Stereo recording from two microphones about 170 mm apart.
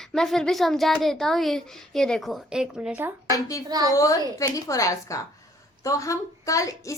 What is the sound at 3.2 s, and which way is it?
Speech, 20° left (ahead or behind).